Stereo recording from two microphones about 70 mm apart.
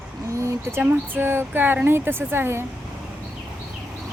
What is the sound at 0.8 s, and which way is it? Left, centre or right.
Speech, right.